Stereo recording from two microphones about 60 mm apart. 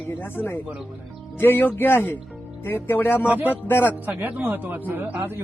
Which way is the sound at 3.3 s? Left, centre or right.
Right.